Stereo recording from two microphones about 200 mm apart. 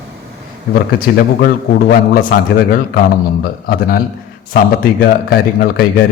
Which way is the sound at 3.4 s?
50° left (ahead or behind).